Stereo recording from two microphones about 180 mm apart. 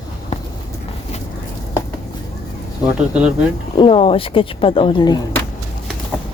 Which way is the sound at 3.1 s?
5° right (ahead or behind).